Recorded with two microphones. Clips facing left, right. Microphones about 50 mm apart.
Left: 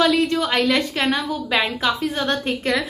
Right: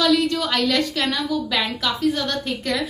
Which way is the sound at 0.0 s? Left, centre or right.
Left.